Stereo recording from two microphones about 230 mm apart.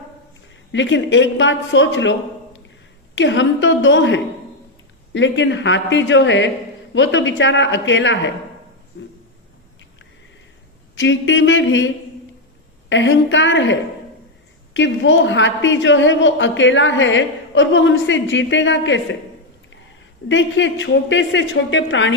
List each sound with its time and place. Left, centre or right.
0.7 s a woman's voice: left
8.9 s a sound: left
10.9 s a woman's voice: left
12.9 s a woman's voice: left
20.2 s a woman's voice: left